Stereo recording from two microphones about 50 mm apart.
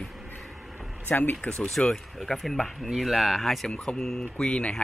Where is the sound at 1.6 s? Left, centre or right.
Centre.